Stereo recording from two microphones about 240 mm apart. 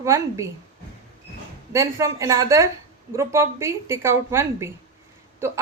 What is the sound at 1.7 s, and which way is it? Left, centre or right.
A woman's voice, centre.